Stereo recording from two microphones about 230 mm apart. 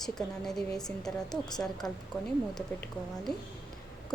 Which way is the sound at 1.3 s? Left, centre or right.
Centre.